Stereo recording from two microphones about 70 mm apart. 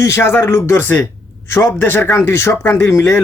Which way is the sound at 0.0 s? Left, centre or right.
Left.